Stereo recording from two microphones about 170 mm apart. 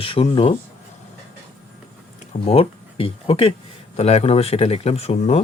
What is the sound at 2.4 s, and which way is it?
Speech, 35° left (ahead or behind).